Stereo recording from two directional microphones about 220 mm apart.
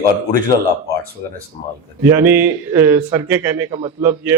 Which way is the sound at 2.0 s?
10° right (ahead or behind).